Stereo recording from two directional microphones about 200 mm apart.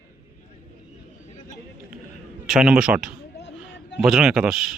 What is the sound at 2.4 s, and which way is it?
Speech, 5° right (ahead or behind).